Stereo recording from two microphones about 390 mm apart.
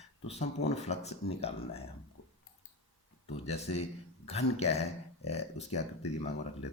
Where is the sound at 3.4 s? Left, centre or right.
Centre.